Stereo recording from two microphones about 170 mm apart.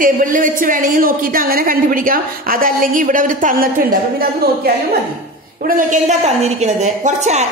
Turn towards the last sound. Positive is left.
turn(degrees=-40)  # may be behind; listen again after turning